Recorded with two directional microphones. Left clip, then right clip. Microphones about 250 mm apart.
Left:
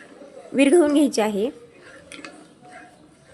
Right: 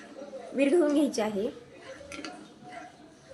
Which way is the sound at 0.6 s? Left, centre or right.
Left.